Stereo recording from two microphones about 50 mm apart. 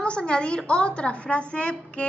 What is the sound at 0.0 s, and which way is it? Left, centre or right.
A woman's voice, centre.